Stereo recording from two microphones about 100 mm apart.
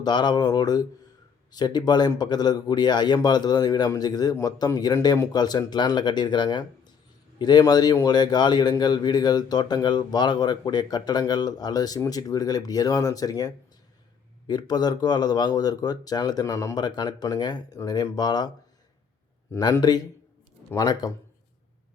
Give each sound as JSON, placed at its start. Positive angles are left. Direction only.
{"t": 0.0, "sound": "speech", "side_deg": 45}
{"t": 16.7, "sound": "speech", "side_deg": 45}
{"t": 19.8, "sound": "speech", "side_deg": 45}